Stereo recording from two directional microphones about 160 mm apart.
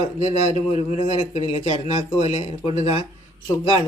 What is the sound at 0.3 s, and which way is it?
A man's voice, 40° left (ahead or behind).